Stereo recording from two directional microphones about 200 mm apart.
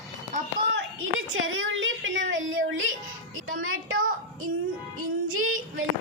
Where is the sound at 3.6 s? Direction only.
90° right.